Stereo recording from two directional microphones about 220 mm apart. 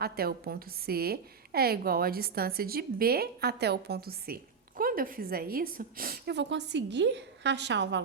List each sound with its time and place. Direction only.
0.0 s a woman's voice: 45° right (ahead or behind)